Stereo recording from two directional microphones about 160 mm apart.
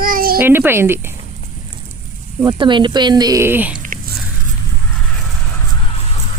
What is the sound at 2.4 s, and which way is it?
Speech, 25° right (ahead or behind).